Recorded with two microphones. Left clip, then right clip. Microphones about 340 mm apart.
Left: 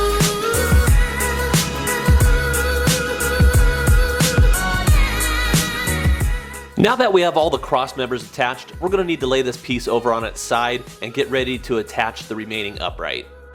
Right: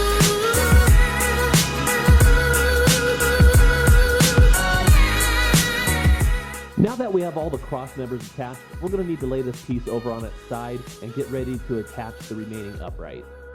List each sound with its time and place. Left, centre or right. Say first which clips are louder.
0.0 s music: left 1 dB; centre
7.3 s speech: left 10 dB; left
7.8 s speech: left 9 dB; centre